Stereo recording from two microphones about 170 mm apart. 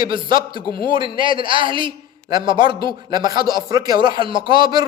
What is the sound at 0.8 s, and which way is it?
A man's voice, 30° right (ahead or behind).